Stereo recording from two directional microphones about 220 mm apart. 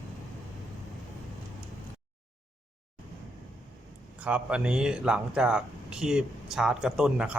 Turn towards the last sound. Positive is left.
turn(degrees=-5)  # may be behind; listen again after turning